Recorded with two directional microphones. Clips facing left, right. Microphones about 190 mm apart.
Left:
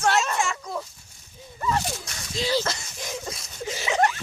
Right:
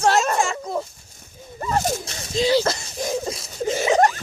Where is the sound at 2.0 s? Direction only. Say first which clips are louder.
Right 8 dB; 25° right (ahead or behind).